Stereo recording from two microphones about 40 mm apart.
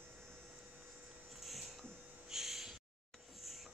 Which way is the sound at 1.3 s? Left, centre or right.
Centre.